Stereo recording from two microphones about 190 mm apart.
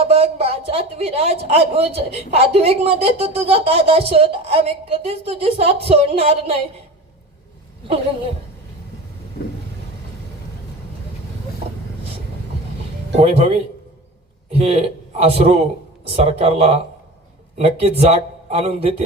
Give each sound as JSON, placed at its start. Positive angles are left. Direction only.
{"t": 0.0, "sound": "speech", "side_deg": -30}
{"t": 13.1, "sound": "speech", "side_deg": -35}
{"t": 14.5, "sound": "a man's voice", "side_deg": -30}